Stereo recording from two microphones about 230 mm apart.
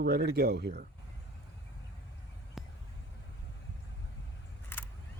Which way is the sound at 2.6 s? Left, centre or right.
Centre.